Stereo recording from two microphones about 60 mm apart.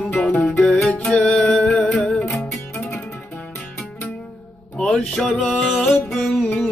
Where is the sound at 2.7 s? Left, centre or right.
Left.